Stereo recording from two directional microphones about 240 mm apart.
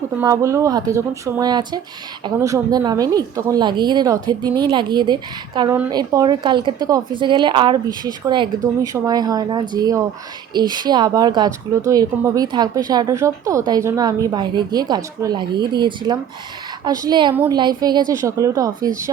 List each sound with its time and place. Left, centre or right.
0.2 s a woman's voice: centre
17.3 s a woman's voice: centre